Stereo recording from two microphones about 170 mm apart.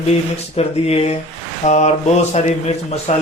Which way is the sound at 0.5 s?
35° left (ahead or behind).